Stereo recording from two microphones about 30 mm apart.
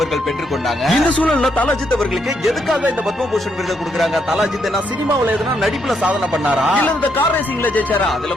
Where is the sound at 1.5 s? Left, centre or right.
Left.